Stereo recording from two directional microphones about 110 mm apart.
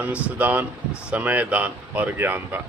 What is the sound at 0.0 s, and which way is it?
Speech, 15° right (ahead or behind).